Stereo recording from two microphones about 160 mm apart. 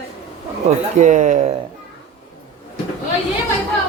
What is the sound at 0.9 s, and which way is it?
Speech, 50° right (ahead or behind).